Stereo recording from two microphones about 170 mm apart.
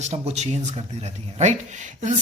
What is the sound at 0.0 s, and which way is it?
Speech, 40° right (ahead or behind).